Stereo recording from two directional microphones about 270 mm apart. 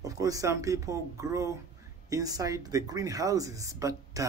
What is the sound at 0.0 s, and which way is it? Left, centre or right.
Speech, centre.